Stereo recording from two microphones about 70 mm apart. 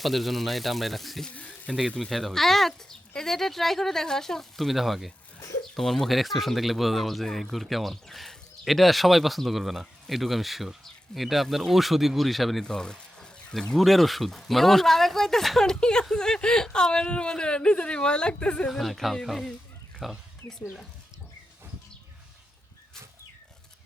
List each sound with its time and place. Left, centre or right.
0.0 s speech: centre
1.3 s speech: centre
2.0 s speech: centre
18.7 s speech: centre